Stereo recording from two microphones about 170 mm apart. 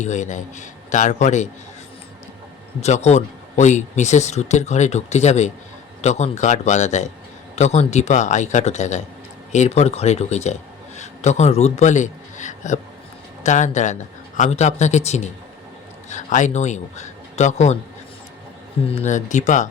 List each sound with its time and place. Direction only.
0.0 s a man's voice: 45° left (ahead or behind)
2.8 s a man's voice: 40° left (ahead or behind)
18.9 s a man's voice: 45° left (ahead or behind)